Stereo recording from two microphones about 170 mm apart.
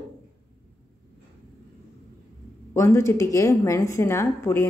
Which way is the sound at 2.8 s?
15° left (ahead or behind).